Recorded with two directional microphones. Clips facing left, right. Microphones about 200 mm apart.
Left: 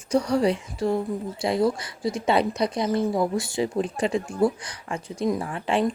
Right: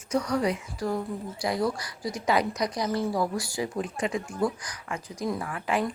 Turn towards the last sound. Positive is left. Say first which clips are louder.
# left 4 dB
turn(degrees=30)  # may be behind; listen again after turning